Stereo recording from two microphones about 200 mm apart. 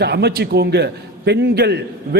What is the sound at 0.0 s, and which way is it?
A man's voice, 55° right (ahead or behind).